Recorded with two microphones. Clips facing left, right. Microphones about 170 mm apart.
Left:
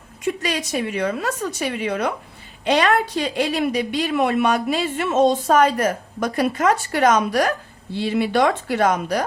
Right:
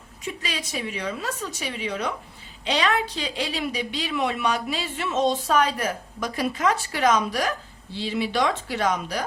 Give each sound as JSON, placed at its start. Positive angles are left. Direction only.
{"t": 0.4, "sound": "a woman's voice", "side_deg": 50}